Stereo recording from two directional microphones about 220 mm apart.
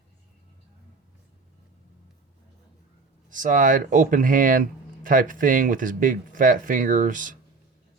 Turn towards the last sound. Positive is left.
turn(degrees=-35)  # may be behind; listen again after turning